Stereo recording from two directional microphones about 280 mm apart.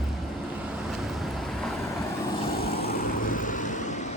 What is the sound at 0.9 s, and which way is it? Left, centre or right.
Vehicle, centre.